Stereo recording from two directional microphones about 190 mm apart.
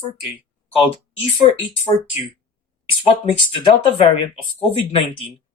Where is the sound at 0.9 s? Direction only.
30° left (ahead or behind).